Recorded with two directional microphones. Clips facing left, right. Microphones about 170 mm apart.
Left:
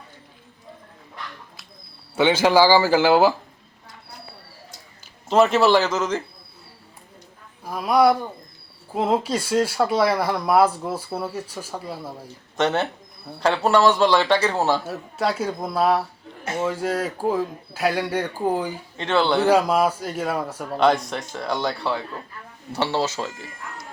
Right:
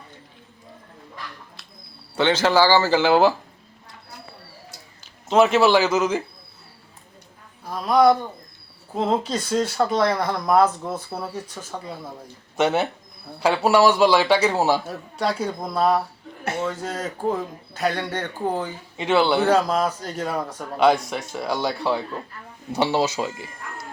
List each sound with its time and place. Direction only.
2.1 s speech: 10° left (ahead or behind)
5.3 s speech: centre (ahead or behind)
7.6 s speech: 10° left (ahead or behind)
12.5 s a man's voice: 10° right (ahead or behind)
14.8 s speech: 5° left (ahead or behind)
18.9 s a man's voice: 10° right (ahead or behind)
19.5 s speech: 10° left (ahead or behind)
20.7 s a man's voice: 5° right (ahead or behind)